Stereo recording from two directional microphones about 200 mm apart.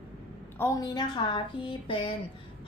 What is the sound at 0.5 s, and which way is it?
A woman's voice, 15° left (ahead or behind).